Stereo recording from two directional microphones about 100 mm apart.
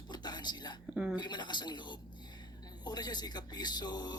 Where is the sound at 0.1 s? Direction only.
45° left (ahead or behind).